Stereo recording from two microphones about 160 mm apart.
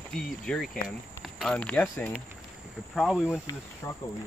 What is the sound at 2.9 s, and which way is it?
Speech, centre (ahead or behind).